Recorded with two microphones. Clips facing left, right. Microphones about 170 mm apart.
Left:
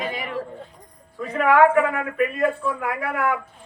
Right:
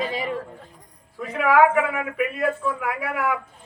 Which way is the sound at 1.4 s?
5° right (ahead or behind).